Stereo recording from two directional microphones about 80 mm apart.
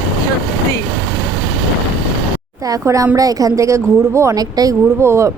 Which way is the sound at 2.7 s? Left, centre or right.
Right.